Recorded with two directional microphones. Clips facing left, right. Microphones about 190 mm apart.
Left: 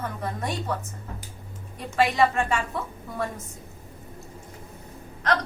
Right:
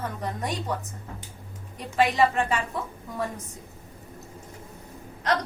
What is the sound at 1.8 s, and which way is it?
Speech, 15° right (ahead or behind).